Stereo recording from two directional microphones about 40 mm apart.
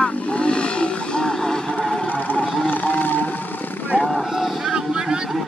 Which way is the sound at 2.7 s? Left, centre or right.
Left.